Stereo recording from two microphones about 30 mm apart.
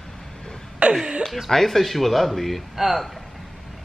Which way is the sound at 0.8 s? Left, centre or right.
Right.